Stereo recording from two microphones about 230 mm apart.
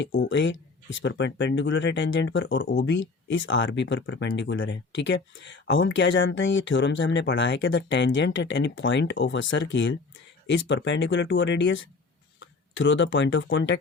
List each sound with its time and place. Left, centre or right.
0.0 s speech: left